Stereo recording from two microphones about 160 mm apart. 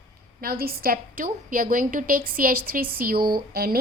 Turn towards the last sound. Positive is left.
turn(degrees=-70)  # may be behind; listen again after turning